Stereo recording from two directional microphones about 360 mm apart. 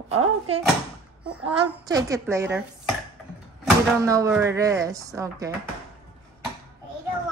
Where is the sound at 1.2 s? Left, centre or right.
Centre.